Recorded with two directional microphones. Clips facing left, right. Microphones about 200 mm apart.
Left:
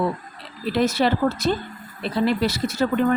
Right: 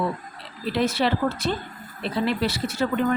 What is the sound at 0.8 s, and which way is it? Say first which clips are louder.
Speech: left 3 dB; 45° left (ahead or behind).